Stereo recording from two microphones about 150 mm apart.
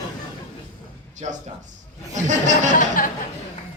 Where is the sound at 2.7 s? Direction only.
65° left (ahead or behind).